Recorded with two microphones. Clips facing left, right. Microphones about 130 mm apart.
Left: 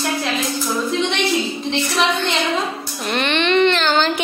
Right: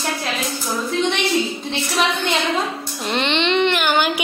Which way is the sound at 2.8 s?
20° right (ahead or behind).